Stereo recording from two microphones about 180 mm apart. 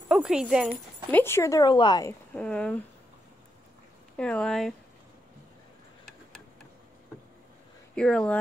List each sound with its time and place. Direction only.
0.1 s speech: 5° right (ahead or behind)
0.7 s speech: 10° left (ahead or behind)
2.3 s speech: 5° left (ahead or behind)
4.2 s speech: 5° left (ahead or behind)
7.9 s speech: 5° left (ahead or behind)